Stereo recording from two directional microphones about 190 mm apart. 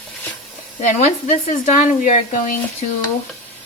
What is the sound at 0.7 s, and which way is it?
Speech, 35° left (ahead or behind).